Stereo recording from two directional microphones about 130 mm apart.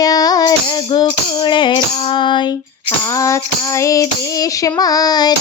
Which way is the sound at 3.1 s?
25° left (ahead or behind).